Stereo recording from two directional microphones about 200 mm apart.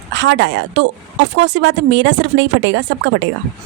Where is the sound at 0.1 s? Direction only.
65° right (ahead or behind).